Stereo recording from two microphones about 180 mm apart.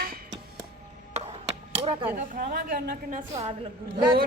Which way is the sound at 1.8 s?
30° right (ahead or behind).